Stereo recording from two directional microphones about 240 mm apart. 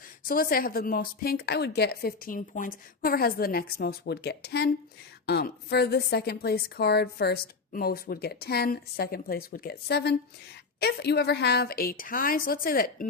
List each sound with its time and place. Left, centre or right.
0.3 s a woman's voice: left